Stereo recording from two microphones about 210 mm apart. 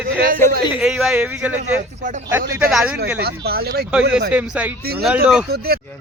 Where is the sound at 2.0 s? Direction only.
35° right (ahead or behind).